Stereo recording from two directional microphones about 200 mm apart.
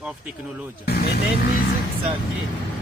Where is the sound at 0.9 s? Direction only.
50° left (ahead or behind).